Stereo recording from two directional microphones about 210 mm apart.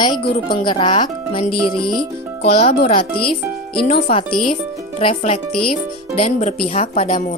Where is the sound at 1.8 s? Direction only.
Centre (ahead or behind).